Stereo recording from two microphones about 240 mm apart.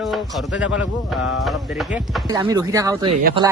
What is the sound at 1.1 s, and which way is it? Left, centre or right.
Speech, centre.